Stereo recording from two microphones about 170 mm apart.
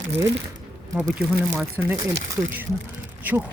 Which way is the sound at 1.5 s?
15° right (ahead or behind).